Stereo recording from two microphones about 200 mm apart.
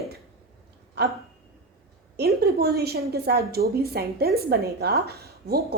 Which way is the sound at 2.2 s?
50° right (ahead or behind).